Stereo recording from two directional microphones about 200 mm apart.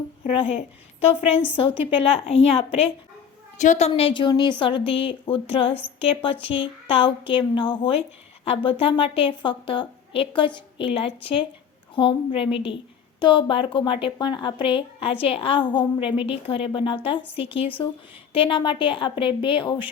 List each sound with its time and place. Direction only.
0.3 s a woman's voice: 30° left (ahead or behind)